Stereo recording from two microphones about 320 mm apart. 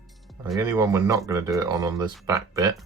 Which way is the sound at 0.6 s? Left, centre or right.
Centre.